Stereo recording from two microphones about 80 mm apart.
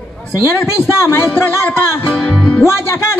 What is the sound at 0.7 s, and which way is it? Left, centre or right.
Music, left.